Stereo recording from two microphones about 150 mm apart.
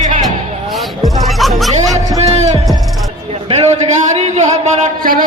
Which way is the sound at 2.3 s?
45° right (ahead or behind).